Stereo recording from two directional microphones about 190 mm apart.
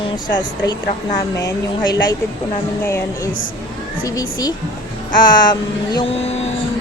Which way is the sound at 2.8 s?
15° left (ahead or behind).